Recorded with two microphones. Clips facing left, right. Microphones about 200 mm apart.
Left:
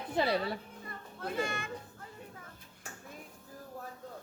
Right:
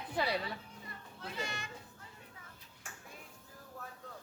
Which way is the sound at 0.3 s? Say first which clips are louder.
Left 5 dB; 45° left (ahead or behind).